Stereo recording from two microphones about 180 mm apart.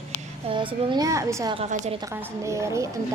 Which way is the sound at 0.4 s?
30° right (ahead or behind).